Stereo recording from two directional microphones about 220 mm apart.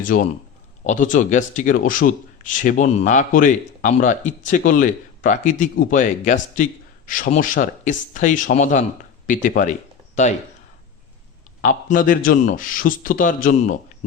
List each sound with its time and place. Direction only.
0.0 s a man's voice: 40° left (ahead or behind)
11.6 s a man's voice: 40° left (ahead or behind)